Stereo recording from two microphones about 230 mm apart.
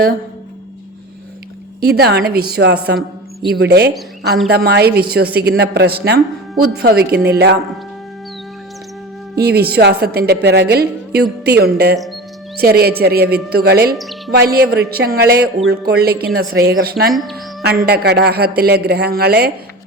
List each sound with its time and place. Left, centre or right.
1.8 s a woman's voice: right
9.3 s a woman's voice: right
17.1 s speech: centre
17.6 s a woman's voice: right